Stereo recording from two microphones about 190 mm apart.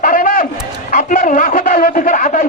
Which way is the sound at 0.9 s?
45° left (ahead or behind).